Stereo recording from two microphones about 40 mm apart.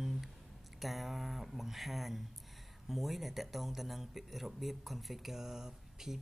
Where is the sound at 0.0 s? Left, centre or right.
Centre.